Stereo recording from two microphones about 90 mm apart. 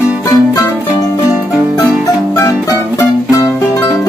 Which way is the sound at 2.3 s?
35° left (ahead or behind).